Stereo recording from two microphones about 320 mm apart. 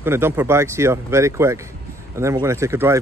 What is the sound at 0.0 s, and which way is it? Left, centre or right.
Speech, centre.